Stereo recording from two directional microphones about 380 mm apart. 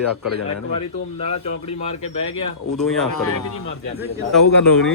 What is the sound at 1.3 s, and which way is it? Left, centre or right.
Speech, centre.